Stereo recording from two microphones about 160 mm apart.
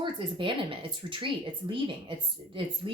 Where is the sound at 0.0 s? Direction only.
30° right (ahead or behind).